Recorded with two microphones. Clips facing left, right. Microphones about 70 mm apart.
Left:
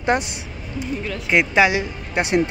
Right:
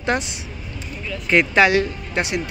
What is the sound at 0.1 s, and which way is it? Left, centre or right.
Speech, left.